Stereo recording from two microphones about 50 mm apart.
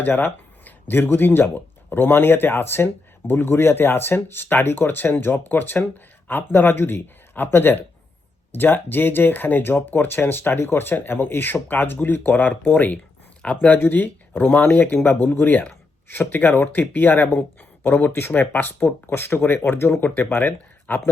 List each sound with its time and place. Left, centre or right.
0.2 s speech: left
13.4 s speech: left
13.7 s speech: left